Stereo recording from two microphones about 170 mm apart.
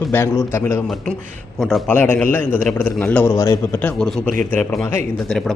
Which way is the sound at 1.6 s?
5° left (ahead or behind).